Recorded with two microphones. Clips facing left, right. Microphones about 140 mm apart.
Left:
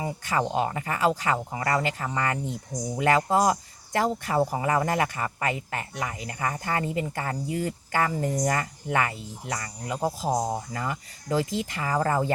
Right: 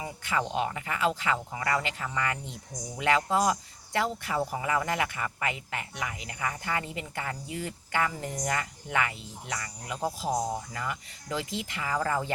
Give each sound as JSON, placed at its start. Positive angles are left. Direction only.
{"t": 0.0, "sound": "speech", "side_deg": 35}